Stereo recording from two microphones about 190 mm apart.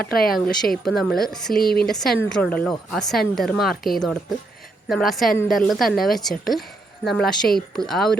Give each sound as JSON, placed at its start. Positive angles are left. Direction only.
{"t": 0.0, "sound": "speech", "side_deg": 50}
{"t": 0.6, "sound": "speech", "side_deg": 0}
{"t": 1.6, "sound": "speech", "side_deg": 55}
{"t": 1.9, "sound": "speech", "side_deg": 0}